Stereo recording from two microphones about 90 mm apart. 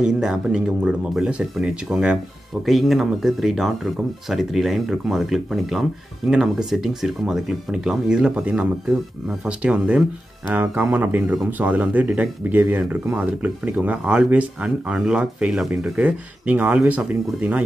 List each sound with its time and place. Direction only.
0.0 s speech: 5° right (ahead or behind)